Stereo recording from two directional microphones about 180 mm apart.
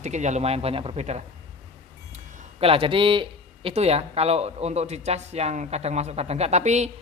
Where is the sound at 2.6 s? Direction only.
30° right (ahead or behind).